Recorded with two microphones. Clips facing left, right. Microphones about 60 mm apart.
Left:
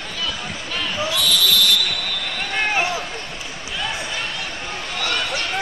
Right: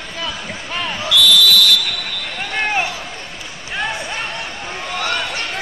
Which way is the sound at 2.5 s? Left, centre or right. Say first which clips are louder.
Right 1 dB; centre.